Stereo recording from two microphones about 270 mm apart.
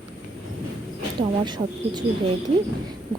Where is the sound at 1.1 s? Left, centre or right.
Centre.